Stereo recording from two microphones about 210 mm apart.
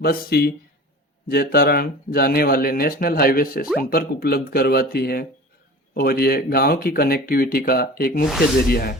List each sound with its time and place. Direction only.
0.0 s speech: 45° left (ahead or behind)